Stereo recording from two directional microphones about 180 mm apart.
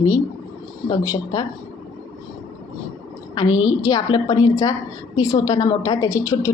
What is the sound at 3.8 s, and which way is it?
A woman's voice, 20° left (ahead or behind).